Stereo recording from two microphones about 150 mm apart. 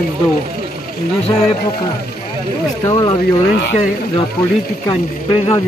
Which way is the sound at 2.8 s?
25° left (ahead or behind).